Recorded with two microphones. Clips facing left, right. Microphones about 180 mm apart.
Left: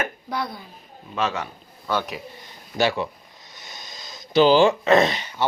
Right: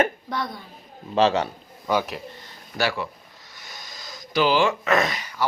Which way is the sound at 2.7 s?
20° left (ahead or behind).